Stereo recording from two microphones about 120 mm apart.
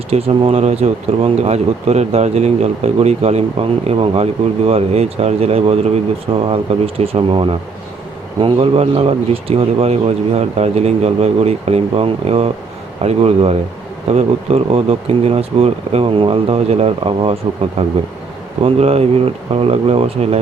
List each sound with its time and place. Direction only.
0.1 s speech: 55° right (ahead or behind)
18.6 s speech: 55° right (ahead or behind)